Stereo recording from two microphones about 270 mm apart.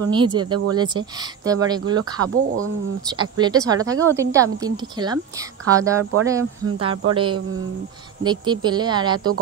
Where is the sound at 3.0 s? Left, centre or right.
Centre.